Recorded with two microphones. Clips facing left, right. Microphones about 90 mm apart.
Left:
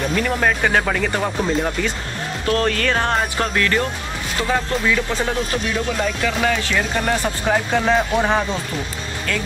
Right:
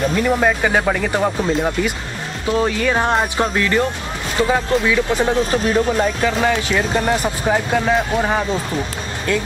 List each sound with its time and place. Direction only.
0.1 s speech: 10° right (ahead or behind)
5.5 s speech: 40° right (ahead or behind)
5.9 s speech: 20° right (ahead or behind); by 8.5 s 5° right (ahead or behind)